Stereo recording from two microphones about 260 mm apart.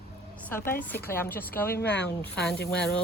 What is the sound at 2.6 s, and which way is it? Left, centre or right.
Speech, left.